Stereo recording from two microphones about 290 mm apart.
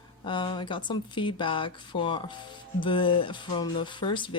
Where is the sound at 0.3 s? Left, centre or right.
Centre.